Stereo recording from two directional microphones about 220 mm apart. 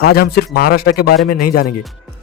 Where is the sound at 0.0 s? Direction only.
45° left (ahead or behind).